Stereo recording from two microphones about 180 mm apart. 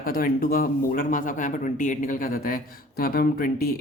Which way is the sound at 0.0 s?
55° left (ahead or behind).